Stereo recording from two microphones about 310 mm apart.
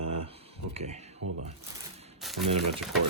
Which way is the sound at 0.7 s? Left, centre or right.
Right.